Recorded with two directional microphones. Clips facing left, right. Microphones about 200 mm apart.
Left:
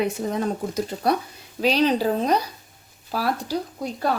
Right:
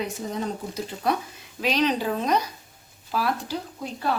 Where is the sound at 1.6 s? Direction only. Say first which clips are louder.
Left 4 dB; 35° left (ahead or behind).